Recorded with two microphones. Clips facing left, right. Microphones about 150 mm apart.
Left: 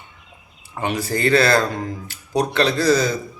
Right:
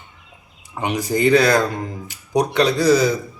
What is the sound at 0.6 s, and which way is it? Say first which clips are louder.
Speech: right 1 dB; 15° right (ahead or behind).